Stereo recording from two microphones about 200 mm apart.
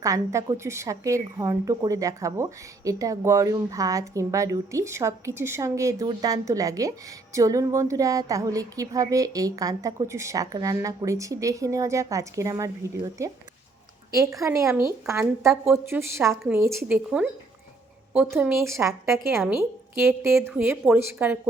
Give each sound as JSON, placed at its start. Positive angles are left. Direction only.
{"t": 0.0, "sound": "a woman's voice", "side_deg": -15}
{"t": 18.1, "sound": "a woman's voice", "side_deg": -5}
{"t": 19.1, "sound": "a woman's voice", "side_deg": 0}
{"t": 19.5, "sound": "a woman's voice", "side_deg": -10}